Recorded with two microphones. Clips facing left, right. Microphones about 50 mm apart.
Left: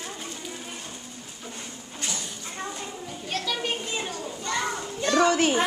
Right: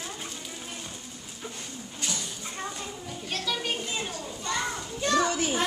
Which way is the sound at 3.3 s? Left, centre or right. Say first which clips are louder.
Left 2 dB; centre.